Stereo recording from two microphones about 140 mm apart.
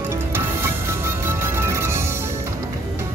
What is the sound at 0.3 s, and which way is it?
Music, 20° right (ahead or behind).